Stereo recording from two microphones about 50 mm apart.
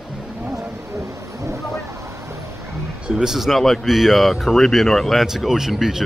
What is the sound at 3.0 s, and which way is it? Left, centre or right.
Speech, centre.